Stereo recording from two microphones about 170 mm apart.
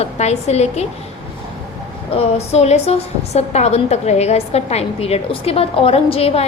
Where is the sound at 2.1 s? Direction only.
35° left (ahead or behind).